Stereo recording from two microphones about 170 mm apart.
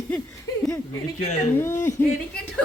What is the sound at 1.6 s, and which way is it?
Speech, 15° left (ahead or behind).